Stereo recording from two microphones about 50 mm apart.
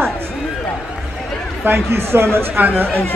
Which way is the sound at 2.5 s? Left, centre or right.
Right.